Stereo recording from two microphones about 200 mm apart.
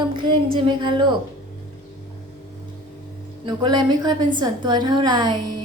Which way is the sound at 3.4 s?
20° right (ahead or behind).